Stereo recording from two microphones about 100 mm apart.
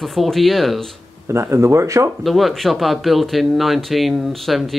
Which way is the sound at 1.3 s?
30° right (ahead or behind).